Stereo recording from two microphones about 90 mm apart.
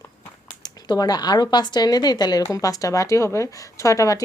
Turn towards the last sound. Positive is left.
turn(degrees=40)  # may be behind; listen again after turning